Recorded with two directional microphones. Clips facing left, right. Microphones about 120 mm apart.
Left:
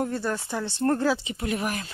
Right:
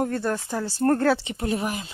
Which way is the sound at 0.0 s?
50° right (ahead or behind).